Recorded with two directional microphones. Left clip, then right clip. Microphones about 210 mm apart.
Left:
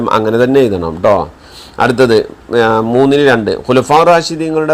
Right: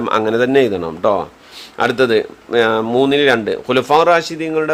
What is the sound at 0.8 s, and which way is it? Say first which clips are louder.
Speech: left 5 dB; 20° right (ahead or behind).